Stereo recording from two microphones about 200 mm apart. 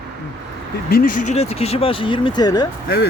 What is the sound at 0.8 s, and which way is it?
Speech, 45° left (ahead or behind).